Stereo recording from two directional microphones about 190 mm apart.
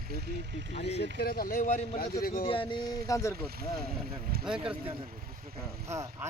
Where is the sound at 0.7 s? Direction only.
35° left (ahead or behind).